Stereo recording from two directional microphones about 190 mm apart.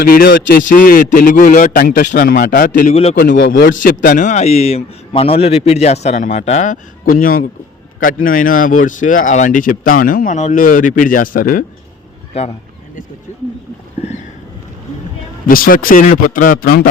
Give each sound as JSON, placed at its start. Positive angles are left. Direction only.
{"t": 0.0, "sound": "speech", "side_deg": 50}
{"t": 2.9, "sound": "a man's voice", "side_deg": 30}
{"t": 3.2, "sound": "a man's voice", "side_deg": 60}
{"t": 3.8, "sound": "a man's voice", "side_deg": 45}
{"t": 12.3, "sound": "a man's voice", "side_deg": 35}
{"t": 15.4, "sound": "speech", "side_deg": 50}